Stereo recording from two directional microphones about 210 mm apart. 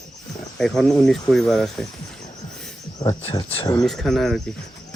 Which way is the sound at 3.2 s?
25° left (ahead or behind).